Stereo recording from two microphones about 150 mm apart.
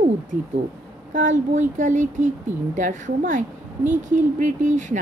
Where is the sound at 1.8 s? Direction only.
55° right (ahead or behind).